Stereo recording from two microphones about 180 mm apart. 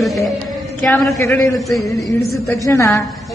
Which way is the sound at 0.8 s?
15° left (ahead or behind).